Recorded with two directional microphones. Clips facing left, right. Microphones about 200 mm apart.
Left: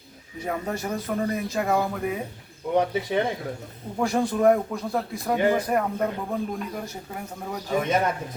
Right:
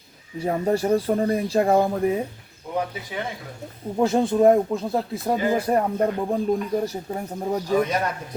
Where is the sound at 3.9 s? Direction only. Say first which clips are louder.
Right 4 dB; 20° right (ahead or behind).